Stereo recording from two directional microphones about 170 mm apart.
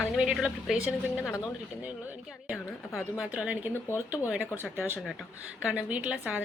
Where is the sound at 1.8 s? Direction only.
10° right (ahead or behind).